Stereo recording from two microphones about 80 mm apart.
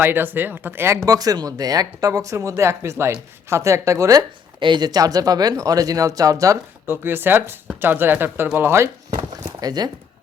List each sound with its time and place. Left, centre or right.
0.0 s speech: right
1.0 s speech: right
4.6 s speech: right
6.8 s speech: right
9.0 s a sound: right